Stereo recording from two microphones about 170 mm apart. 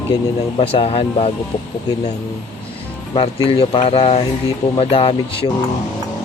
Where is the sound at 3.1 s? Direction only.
35° left (ahead or behind).